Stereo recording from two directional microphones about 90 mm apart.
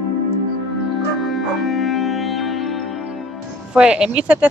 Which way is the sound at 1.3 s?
Centre (ahead or behind).